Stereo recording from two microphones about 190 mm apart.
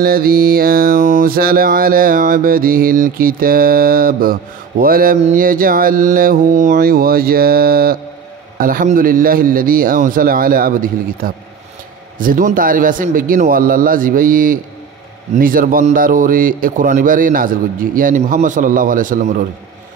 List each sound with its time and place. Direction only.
0.0 s mantra: 50° right (ahead or behind)